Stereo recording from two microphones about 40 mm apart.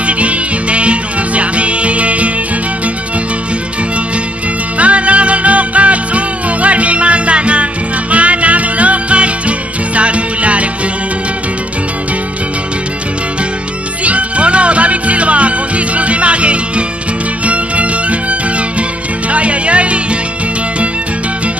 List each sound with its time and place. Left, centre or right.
0.0 s music: right
4.7 s music: right
14.0 s music: right
19.3 s music: right